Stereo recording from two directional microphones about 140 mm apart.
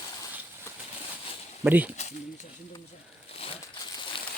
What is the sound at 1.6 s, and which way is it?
Speech, 10° right (ahead or behind).